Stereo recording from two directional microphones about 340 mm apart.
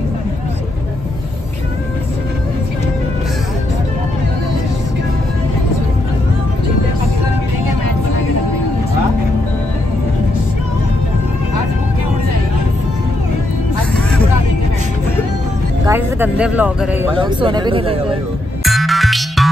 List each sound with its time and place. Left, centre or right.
15.9 s speech: centre
18.6 s music: centre